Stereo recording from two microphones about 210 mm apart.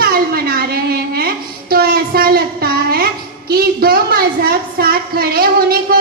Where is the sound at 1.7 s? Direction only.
45° right (ahead or behind).